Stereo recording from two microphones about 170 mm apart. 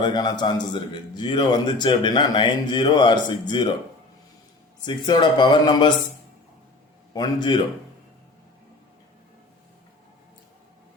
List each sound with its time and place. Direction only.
0.0 s a man's voice: 25° left (ahead or behind)
4.9 s a man's voice: 25° left (ahead or behind)
7.1 s a man's voice: 25° left (ahead or behind)